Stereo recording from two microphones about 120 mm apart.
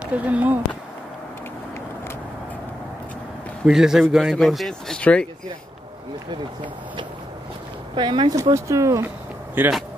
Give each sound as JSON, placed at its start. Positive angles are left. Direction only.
{"t": 0.0, "sound": "speech", "side_deg": -10}
{"t": 3.6, "sound": "speech", "side_deg": -5}
{"t": 7.9, "sound": "speech", "side_deg": -40}
{"t": 8.4, "sound": "speech", "side_deg": -25}